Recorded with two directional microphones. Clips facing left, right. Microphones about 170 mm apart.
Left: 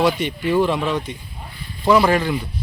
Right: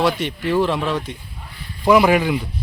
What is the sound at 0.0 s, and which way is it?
Speech, centre (ahead or behind).